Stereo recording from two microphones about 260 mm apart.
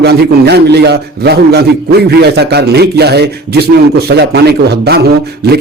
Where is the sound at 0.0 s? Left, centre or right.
Right.